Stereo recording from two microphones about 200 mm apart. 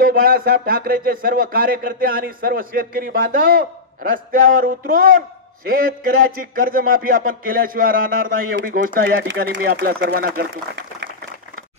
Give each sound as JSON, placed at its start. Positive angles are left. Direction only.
{"t": 0.0, "sound": "a man's voice", "side_deg": -45}